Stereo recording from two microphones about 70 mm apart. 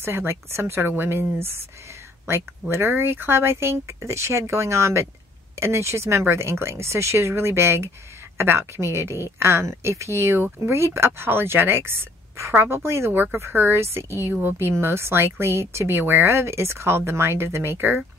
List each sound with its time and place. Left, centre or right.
0.0 s speech: right
2.7 s speech: right